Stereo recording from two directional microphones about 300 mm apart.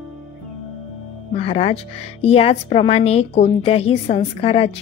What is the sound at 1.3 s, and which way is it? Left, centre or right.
A woman's voice, centre.